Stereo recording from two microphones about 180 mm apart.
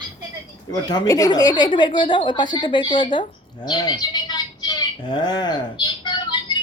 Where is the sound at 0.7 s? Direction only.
20° left (ahead or behind).